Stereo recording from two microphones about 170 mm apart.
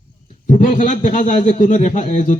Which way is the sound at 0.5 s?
45° left (ahead or behind).